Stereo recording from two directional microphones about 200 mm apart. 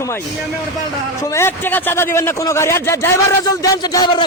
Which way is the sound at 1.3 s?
10° left (ahead or behind).